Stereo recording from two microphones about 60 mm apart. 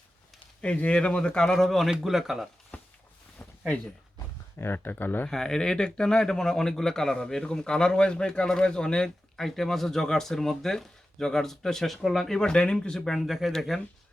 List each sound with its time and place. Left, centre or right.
0.6 s a man's voice: left; by 2.5 s centre
2.7 s a sound: left
4.5 s speech: left
5.3 s a man's voice: centre
13.1 s speech: centre